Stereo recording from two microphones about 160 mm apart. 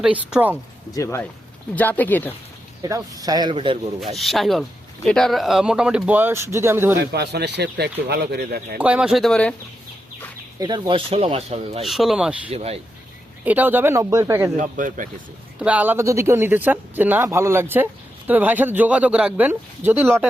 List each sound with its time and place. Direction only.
0.0 s speech: 5° right (ahead or behind)
0.9 s speech: 15° left (ahead or behind)
2.8 s speech: 20° right (ahead or behind)
4.0 s speech: centre (ahead or behind)
7.1 s speech: 90° right; by 8.8 s 70° right (ahead or behind)
8.8 s speech: 5° right (ahead or behind)
10.6 s speech: 25° right (ahead or behind)
11.8 s speech: centre (ahead or behind)
12.5 s speech: 40° right (ahead or behind)
13.4 s speech: 10° right (ahead or behind)
14.5 s speech: 50° right (ahead or behind)
15.5 s speech: 10° right (ahead or behind)